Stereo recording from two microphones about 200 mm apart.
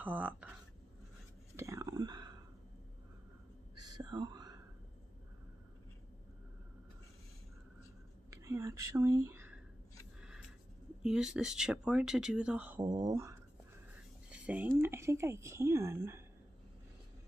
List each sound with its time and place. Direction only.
0.0 s speech: 10° right (ahead or behind)
1.6 s whispering: 15° right (ahead or behind)
3.7 s whispering: 20° right (ahead or behind)
8.3 s speech: 15° right (ahead or behind)
11.0 s speech: 5° right (ahead or behind)
12.8 s a woman's voice: 20° right (ahead or behind)
14.3 s a sound: 5° right (ahead or behind)
14.8 s a woman's voice: 15° right (ahead or behind)